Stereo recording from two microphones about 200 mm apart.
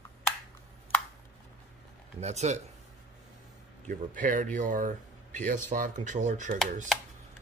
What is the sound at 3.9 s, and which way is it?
Speech, 45° right (ahead or behind).